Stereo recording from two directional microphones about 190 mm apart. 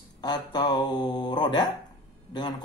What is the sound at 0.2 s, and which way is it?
Speech, 20° left (ahead or behind).